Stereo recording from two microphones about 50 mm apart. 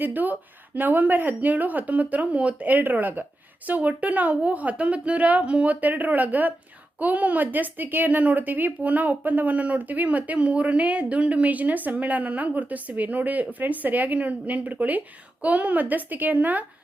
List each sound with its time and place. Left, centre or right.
0.0 s speech: right